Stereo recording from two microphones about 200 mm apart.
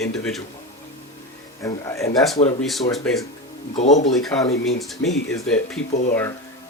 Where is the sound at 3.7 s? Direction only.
35° left (ahead or behind).